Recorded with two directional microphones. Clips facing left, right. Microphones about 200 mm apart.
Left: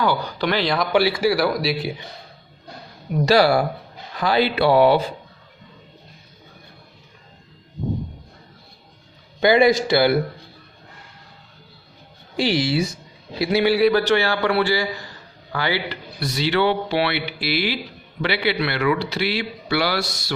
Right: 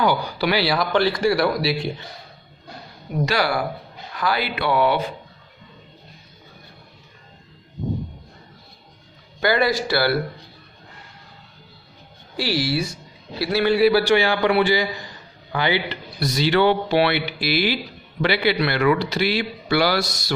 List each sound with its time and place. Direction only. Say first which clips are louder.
0.0 s a man's voice: right 1 dB; 10° right (ahead or behind)
0.9 s a man's voice: left 1 dB; 10° left (ahead or behind)
3.2 s speech: left 7 dB; 30° left (ahead or behind)
9.4 s speech: left 5 dB; 15° left (ahead or behind)
12.4 s a man's voice: left 3 dB; 20° left (ahead or behind)
13.7 s a man's voice: right 1 dB; 5° right (ahead or behind)
16.2 s speech: right 2 dB; 40° right (ahead or behind)